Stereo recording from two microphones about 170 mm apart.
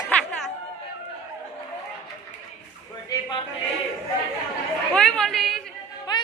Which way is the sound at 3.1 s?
30° left (ahead or behind).